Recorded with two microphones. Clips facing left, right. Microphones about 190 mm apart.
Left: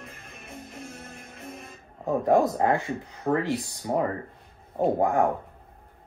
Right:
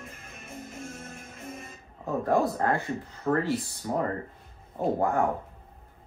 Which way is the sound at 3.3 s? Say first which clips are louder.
Left 1 dB; 35° left (ahead or behind).